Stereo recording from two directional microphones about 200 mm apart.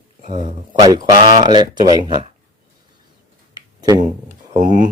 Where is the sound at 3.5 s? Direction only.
20° right (ahead or behind).